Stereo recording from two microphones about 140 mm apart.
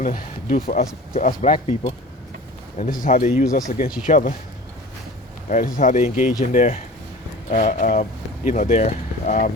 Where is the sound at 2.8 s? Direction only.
80° left.